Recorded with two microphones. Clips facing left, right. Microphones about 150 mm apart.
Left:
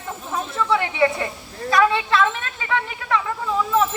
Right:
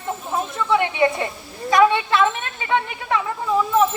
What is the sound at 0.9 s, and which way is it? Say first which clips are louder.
Speech: even; 25° right (ahead or behind).